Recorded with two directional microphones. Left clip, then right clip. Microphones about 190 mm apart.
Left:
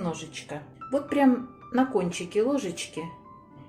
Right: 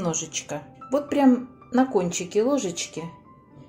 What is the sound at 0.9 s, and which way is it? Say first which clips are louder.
Speech: right 3 dB; 20° right (ahead or behind).